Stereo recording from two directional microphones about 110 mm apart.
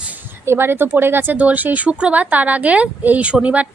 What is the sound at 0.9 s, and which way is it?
A woman's voice, 20° right (ahead or behind).